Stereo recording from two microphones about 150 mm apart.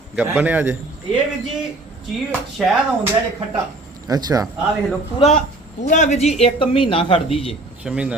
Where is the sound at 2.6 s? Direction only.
5° right (ahead or behind).